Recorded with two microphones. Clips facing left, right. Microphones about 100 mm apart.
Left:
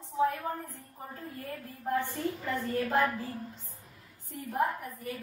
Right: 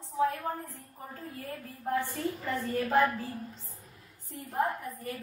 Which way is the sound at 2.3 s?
Centre (ahead or behind).